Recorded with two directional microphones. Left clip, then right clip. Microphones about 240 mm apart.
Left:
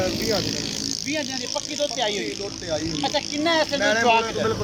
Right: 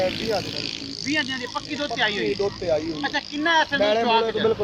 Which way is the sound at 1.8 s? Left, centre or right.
Centre.